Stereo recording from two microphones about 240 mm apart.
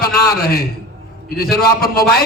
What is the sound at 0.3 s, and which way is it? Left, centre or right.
A man's voice, left.